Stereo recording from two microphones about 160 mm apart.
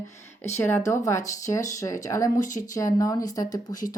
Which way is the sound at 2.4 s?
50° left (ahead or behind).